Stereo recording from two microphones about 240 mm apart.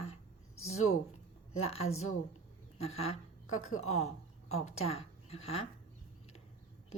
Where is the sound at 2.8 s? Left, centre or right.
Left.